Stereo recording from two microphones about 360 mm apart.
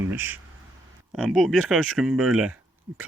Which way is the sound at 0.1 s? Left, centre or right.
Centre.